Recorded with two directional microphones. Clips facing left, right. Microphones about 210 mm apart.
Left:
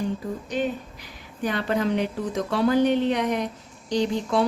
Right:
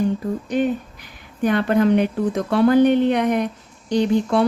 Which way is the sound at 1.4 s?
55° right (ahead or behind).